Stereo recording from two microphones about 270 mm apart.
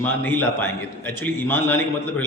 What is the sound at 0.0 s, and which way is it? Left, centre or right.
A man's voice, centre.